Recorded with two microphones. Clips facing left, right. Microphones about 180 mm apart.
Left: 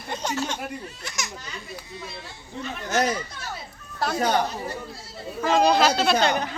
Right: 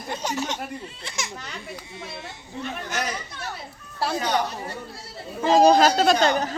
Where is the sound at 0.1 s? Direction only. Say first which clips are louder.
Even; 10° right (ahead or behind).